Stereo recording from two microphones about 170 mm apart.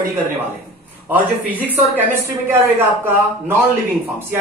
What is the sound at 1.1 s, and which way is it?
A man's voice, 10° right (ahead or behind).